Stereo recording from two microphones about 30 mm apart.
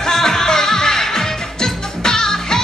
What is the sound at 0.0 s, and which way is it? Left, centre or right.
Music, centre.